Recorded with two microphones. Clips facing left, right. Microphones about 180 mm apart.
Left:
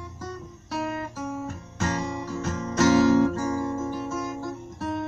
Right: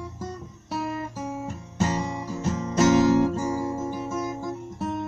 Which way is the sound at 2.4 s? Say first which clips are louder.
Right 1 dB; 20° right (ahead or behind).